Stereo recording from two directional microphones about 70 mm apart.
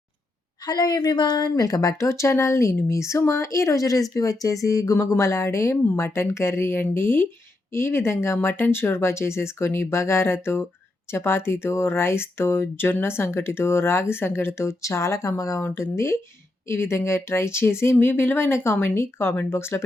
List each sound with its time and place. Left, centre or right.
0.6 s speech: left
4.9 s speech: left
15.6 s speech: left